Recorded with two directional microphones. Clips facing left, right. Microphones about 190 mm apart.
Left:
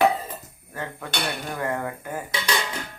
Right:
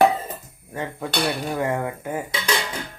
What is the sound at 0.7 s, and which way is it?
Speech, 20° right (ahead or behind).